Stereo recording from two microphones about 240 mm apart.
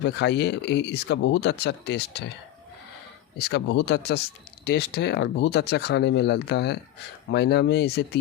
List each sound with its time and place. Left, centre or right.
0.0 s speech: left
3.3 s speech: left